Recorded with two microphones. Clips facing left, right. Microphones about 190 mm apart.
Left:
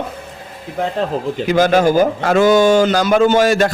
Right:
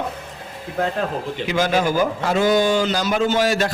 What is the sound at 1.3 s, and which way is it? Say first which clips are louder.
A man's voice: left 7 dB; 40° left (ahead or behind).